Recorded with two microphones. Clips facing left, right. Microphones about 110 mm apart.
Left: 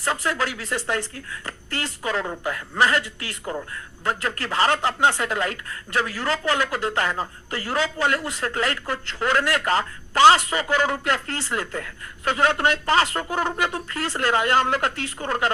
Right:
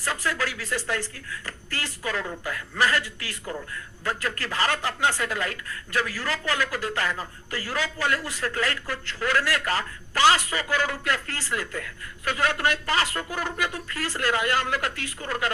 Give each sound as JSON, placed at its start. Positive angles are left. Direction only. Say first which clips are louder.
{"t": 0.0, "sound": "speech", "louder": "left 3 dB", "side_deg": 25}